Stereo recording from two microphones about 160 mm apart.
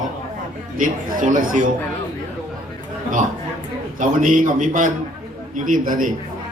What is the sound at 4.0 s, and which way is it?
A man's voice, 55° right (ahead or behind).